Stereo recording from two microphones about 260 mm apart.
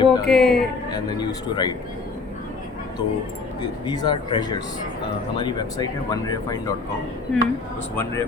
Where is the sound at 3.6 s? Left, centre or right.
Centre.